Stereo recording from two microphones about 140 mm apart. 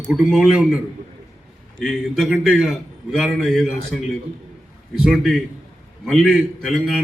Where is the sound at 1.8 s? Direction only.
Centre (ahead or behind).